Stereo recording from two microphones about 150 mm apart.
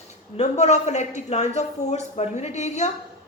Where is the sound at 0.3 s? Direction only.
50° left (ahead or behind).